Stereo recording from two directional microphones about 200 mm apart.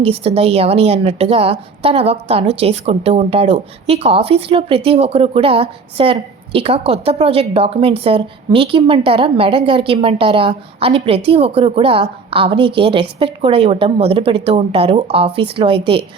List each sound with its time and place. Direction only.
0.0 s a woman's voice: 30° right (ahead or behind)